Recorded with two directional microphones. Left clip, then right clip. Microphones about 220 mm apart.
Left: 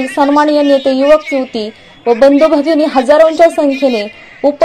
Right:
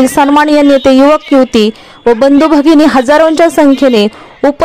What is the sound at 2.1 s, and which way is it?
Speech, 55° right (ahead or behind).